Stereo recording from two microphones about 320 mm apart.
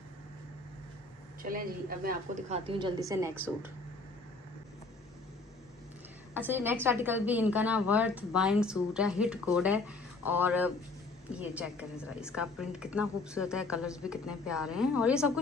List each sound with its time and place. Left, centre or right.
1.4 s a woman's voice: right; by 3.4 s centre
6.3 s a woman's voice: centre